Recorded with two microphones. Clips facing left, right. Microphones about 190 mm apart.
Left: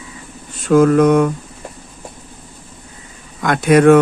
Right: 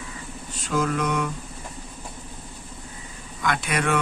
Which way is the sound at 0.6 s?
55° left (ahead or behind).